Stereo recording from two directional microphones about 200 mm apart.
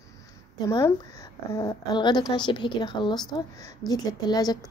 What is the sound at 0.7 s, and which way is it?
A woman's voice, 15° left (ahead or behind).